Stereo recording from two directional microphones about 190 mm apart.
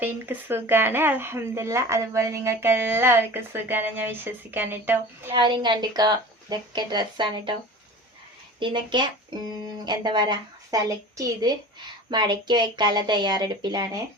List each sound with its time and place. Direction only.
0.0 s speech: 10° right (ahead or behind)
5.3 s a woman's voice: 25° right (ahead or behind)
8.5 s a woman's voice: 25° right (ahead or behind)